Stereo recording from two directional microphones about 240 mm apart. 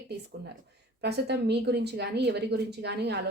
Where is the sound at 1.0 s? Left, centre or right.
Right.